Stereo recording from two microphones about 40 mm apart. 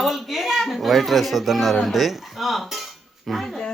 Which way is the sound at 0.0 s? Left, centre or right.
Centre.